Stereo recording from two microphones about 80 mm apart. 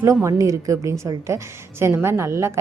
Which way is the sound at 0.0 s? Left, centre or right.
Right.